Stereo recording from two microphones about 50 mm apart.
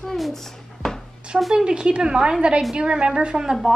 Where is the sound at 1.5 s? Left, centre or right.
Centre.